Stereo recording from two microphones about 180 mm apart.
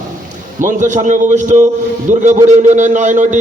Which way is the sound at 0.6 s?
45° right (ahead or behind).